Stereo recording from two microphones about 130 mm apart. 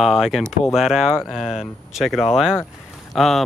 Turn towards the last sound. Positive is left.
turn(degrees=0)  # may be behind; listen again after turning